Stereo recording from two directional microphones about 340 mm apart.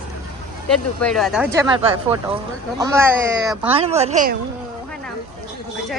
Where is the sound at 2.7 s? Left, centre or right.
Centre.